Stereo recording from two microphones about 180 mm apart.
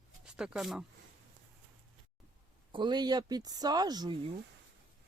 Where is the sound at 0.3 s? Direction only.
5° right (ahead or behind).